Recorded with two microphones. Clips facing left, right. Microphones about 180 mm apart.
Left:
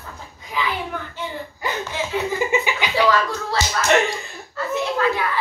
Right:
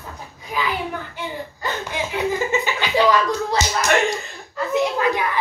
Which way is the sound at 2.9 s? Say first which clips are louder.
Right 2 dB; 15° right (ahead or behind).